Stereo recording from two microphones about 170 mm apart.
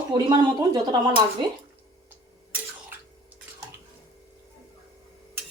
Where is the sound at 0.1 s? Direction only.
25° right (ahead or behind).